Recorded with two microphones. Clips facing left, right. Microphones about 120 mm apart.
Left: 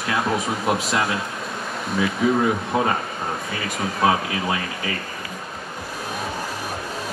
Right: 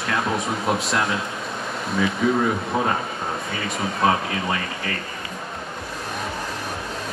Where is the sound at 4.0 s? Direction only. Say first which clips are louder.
Left 1 dB; 5° left (ahead or behind).